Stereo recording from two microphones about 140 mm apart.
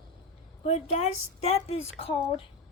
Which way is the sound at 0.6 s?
50° left (ahead or behind).